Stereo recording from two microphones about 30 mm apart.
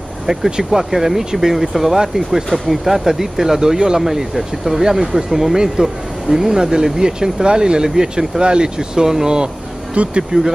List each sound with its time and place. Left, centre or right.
0.7 s speech: centre
8.4 s speech: right
8.7 s speech: centre
10.0 s speech: right
10.3 s speech: right